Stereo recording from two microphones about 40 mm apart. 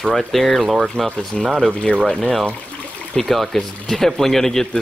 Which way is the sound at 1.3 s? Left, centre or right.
Centre.